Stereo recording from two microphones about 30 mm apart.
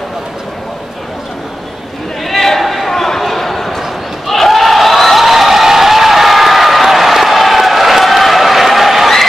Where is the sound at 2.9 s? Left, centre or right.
Centre.